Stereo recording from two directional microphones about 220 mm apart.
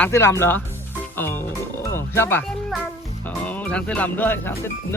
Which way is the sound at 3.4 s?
5° left (ahead or behind).